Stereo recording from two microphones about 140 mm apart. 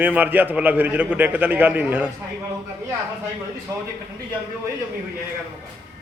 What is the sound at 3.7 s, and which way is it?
Speech, 20° right (ahead or behind).